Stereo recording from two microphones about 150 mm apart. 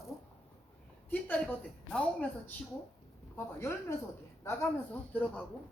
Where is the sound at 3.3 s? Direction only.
20° left (ahead or behind).